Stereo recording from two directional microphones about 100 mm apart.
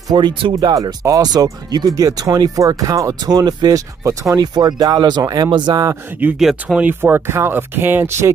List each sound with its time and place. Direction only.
0.1 s speech: 55° right (ahead or behind)
0.6 s speech: 45° right (ahead or behind)
6.3 s speech: 5° right (ahead or behind)
6.8 s speech: 20° right (ahead or behind)